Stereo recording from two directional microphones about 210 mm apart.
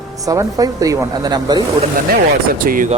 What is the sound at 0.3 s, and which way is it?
A woman's voice, 15° right (ahead or behind).